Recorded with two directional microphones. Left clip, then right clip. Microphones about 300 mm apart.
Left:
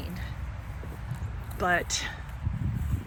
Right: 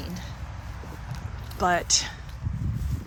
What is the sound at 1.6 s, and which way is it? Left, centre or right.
Speech, centre.